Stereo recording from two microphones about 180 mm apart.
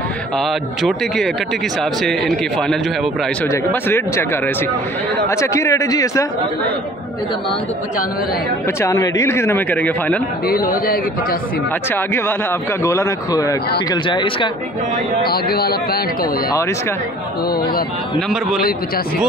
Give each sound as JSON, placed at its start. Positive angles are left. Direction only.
{"t": 0.4, "sound": "a man's voice", "side_deg": 0}
{"t": 5.3, "sound": "a man's voice", "side_deg": 15}
{"t": 8.8, "sound": "a man's voice", "side_deg": 15}
{"t": 10.4, "sound": "a man's voice", "side_deg": 55}
{"t": 11.9, "sound": "a man's voice", "side_deg": 10}
{"t": 15.2, "sound": "a man's voice", "side_deg": 60}